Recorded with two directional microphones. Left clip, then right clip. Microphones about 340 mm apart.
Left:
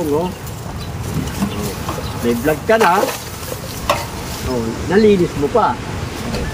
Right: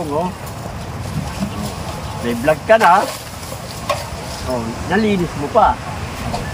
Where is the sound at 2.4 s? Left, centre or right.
Centre.